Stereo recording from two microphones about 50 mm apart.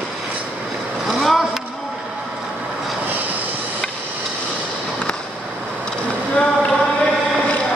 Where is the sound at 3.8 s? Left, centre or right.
Centre.